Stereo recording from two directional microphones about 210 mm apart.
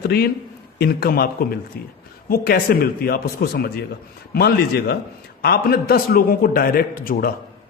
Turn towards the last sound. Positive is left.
turn(degrees=45)  # may be behind; listen again after turning